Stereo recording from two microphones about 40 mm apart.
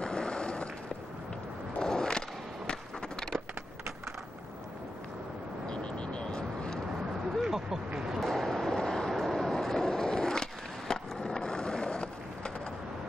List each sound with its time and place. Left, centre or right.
0.0 s a sound: left
1.8 s skateboard: centre
5.7 s vehicle: left
7.4 s vehicle: centre
8.2 s vehicle: centre
9.2 s skateboard: centre